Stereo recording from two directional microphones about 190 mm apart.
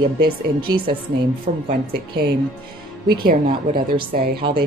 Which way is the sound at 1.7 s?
55° right (ahead or behind).